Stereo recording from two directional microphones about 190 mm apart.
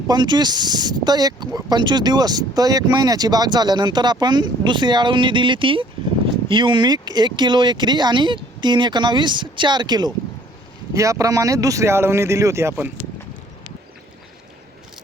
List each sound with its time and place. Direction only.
0.1 s speech: 20° right (ahead or behind)